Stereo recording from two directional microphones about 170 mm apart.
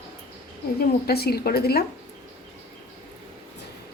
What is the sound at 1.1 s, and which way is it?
Speech, 65° left (ahead or behind).